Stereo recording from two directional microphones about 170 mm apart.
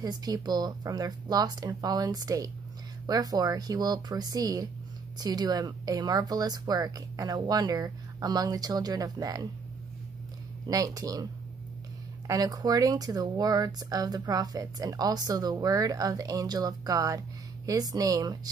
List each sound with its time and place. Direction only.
0.0 s speech: 25° right (ahead or behind)
10.7 s speech: 20° right (ahead or behind)
12.3 s speech: 20° right (ahead or behind)